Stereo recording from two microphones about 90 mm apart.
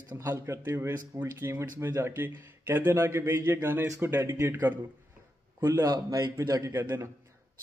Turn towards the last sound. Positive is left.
turn(degrees=-30)  # may be behind; listen again after turning